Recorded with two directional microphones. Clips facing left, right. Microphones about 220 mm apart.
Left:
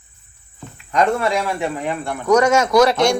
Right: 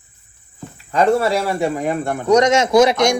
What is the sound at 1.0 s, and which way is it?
Speech, 35° right (ahead or behind).